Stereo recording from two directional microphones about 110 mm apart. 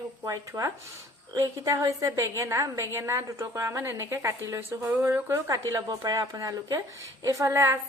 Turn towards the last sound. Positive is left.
turn(degrees=-25)  # may be behind; listen again after turning